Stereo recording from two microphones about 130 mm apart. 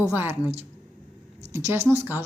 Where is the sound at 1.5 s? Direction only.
20° right (ahead or behind).